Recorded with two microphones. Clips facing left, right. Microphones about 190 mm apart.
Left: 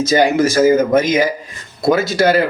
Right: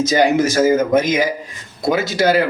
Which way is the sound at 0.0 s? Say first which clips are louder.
Left 1 dB; 20° right (ahead or behind).